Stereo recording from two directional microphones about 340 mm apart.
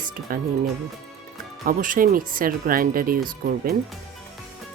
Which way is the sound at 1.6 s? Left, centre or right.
Right.